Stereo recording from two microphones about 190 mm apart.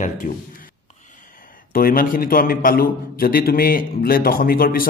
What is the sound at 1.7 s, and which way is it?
Speech, 50° left (ahead or behind).